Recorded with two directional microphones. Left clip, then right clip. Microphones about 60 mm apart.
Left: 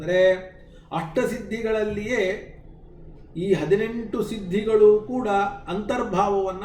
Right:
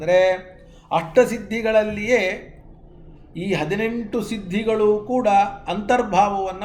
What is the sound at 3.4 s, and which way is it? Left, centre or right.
Speech, right.